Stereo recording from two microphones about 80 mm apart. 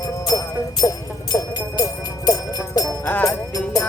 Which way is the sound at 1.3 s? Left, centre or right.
Left.